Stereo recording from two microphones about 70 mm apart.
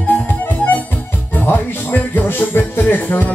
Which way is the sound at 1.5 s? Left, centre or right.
Left.